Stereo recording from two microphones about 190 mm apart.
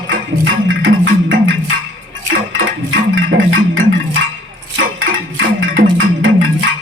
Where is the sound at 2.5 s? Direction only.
90° right.